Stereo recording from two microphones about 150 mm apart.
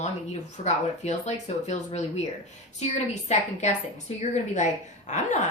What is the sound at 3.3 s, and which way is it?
A woman's voice, 50° left (ahead or behind).